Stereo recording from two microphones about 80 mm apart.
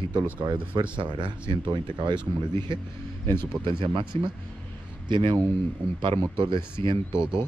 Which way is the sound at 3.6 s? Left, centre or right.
Right.